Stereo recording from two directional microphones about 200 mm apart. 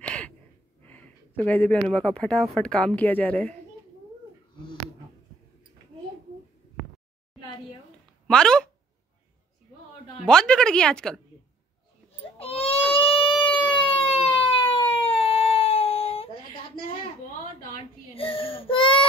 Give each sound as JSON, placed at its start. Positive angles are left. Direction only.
{"t": 0.0, "sound": "gasp", "side_deg": 5}
{"t": 0.8, "sound": "speech", "side_deg": 10}
{"t": 8.3, "sound": "a woman's voice", "side_deg": 5}
{"t": 10.2, "sound": "a woman's voice", "side_deg": 5}
{"t": 12.2, "sound": "baby cry", "side_deg": 30}
{"t": 12.9, "sound": "a sound", "side_deg": 25}
{"t": 13.7, "sound": "siren", "side_deg": 25}
{"t": 18.1, "sound": "baby cry", "side_deg": 25}